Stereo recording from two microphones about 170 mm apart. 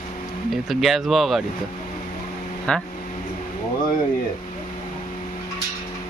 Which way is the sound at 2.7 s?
5° left (ahead or behind).